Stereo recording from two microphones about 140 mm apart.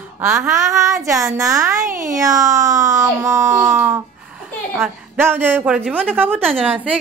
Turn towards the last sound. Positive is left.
turn(degrees=-10)  # may be behind; listen again after turning